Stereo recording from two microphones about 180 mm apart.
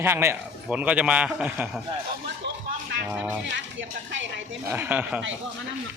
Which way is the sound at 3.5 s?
90° right.